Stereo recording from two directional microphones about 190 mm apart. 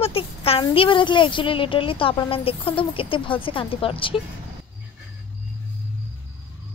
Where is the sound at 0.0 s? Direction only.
30° left (ahead or behind).